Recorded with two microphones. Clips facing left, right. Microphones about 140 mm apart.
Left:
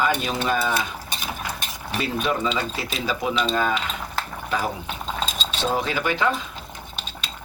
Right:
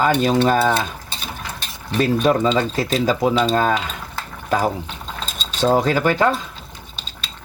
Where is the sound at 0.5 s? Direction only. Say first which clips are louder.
Right 6 dB; 60° right (ahead or behind).